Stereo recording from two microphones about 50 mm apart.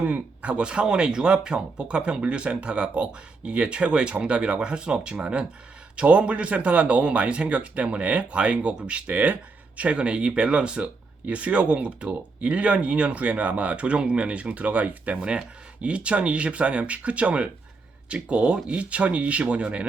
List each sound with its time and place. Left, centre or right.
0.0 s speech: right